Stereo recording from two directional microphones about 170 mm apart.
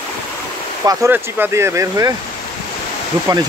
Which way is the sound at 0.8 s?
15° right (ahead or behind).